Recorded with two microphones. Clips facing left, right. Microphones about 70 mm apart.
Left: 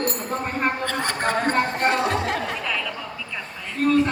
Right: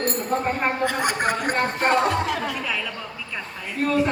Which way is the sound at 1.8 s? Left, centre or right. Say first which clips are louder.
Right 4 dB; right.